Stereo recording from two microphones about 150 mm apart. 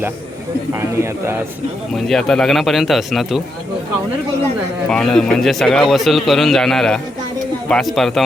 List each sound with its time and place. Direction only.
0.7 s speech: 20° right (ahead or behind)
2.0 s a man's voice: centre (ahead or behind)
4.9 s a man's voice: 5° left (ahead or behind)